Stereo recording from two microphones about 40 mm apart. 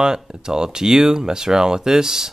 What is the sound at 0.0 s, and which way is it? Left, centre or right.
Speech, centre.